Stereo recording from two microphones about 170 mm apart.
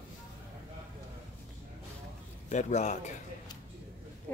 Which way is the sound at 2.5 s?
45° left (ahead or behind).